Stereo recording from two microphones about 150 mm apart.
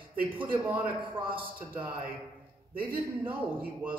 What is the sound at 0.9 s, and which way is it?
Speech, 35° right (ahead or behind).